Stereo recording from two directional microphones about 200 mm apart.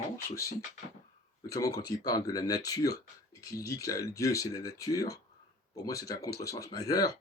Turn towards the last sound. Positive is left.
turn(degrees=20)  # may be behind; listen again after turning